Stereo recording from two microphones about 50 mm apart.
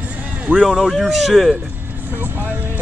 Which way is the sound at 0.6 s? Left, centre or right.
Centre.